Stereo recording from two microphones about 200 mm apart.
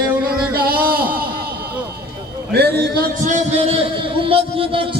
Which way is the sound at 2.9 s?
40° right (ahead or behind).